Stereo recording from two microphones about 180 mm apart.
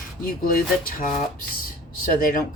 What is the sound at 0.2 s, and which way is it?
Speech, 50° left (ahead or behind).